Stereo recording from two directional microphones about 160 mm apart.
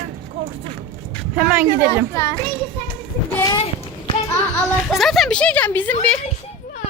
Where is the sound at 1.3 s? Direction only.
10° right (ahead or behind).